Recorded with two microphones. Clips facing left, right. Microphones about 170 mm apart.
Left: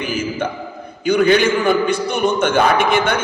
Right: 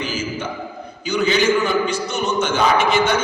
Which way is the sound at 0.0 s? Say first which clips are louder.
Left 4 dB; 55° left (ahead or behind).